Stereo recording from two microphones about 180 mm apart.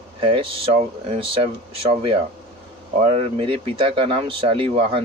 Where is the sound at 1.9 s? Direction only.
30° right (ahead or behind).